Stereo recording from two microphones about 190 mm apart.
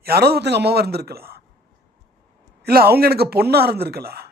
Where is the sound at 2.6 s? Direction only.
55° right (ahead or behind).